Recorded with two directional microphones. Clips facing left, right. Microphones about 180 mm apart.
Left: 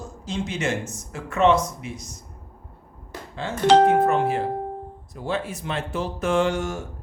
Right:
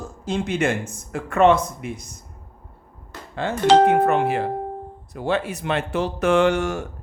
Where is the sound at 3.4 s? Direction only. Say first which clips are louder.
Right 1 dB; 60° right (ahead or behind).